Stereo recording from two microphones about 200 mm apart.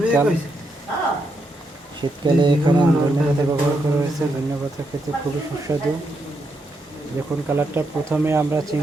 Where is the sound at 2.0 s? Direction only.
25° right (ahead or behind).